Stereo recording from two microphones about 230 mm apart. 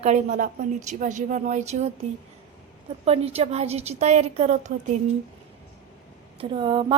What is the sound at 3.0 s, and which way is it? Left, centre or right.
Speech, right.